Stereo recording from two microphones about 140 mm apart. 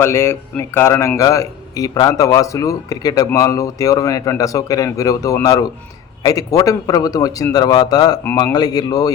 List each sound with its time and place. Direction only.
0.0 s a man's voice: 20° left (ahead or behind)